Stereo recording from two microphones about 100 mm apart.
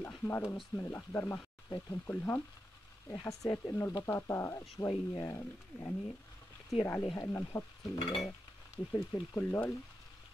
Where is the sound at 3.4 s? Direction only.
35° left (ahead or behind).